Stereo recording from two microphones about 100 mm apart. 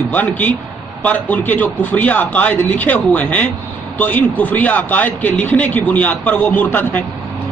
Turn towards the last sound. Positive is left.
turn(degrees=20)  # may be behind; listen again after turning